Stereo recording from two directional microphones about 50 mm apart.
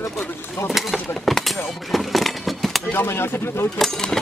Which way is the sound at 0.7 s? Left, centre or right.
Centre.